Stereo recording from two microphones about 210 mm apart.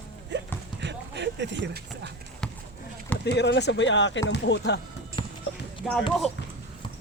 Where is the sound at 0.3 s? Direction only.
55° right (ahead or behind).